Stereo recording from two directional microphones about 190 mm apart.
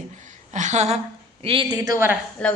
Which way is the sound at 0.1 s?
40° right (ahead or behind).